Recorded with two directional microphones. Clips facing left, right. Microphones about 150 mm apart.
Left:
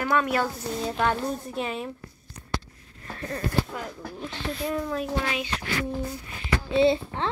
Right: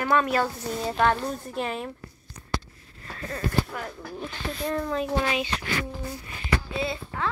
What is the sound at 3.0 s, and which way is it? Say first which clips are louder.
Speech: left 1 dB; 30° left (ahead or behind).